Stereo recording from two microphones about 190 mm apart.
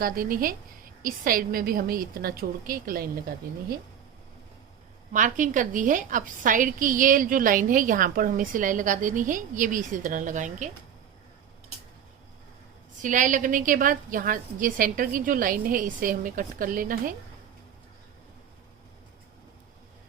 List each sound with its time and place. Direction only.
0.0 s a woman's voice: 50° right (ahead or behind)
5.1 s a woman's voice: 40° right (ahead or behind)
13.0 s a woman's voice: 40° right (ahead or behind)